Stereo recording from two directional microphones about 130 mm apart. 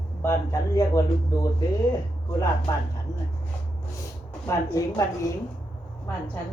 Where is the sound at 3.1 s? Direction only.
25° left (ahead or behind).